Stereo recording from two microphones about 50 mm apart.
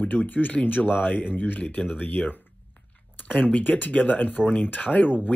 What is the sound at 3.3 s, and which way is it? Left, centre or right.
Speech, left.